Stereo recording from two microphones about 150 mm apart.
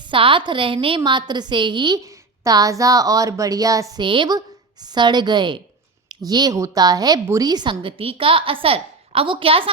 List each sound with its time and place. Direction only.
0.0 s a woman's voice: 35° right (ahead or behind)